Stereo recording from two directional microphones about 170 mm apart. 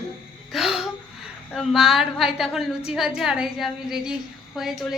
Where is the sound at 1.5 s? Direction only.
5° right (ahead or behind).